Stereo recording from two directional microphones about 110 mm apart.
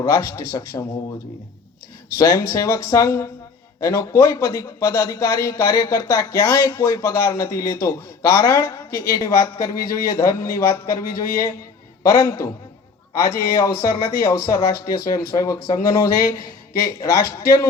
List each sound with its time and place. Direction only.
0.1 s a man's voice: 25° left (ahead or behind)
2.1 s a man's voice: 25° left (ahead or behind)
12.1 s a man's voice: 30° left (ahead or behind)